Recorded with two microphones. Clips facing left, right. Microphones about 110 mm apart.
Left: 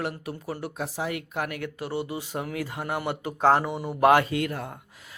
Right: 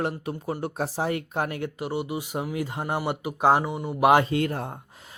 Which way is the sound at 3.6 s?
Centre (ahead or behind).